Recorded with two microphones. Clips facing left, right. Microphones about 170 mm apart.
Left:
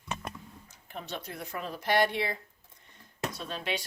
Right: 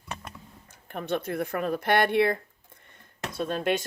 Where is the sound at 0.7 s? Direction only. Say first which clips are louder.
Right 10 dB; 55° right (ahead or behind).